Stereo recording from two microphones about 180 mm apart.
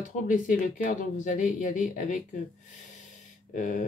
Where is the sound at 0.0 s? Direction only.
45° left (ahead or behind).